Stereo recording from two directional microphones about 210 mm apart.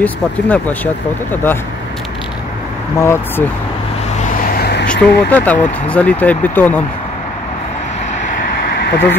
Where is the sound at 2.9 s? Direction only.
10° left (ahead or behind).